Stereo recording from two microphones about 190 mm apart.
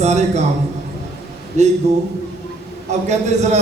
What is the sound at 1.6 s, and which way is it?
Speech, 40° right (ahead or behind).